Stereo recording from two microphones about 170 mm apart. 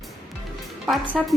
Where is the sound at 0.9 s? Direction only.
Centre (ahead or behind).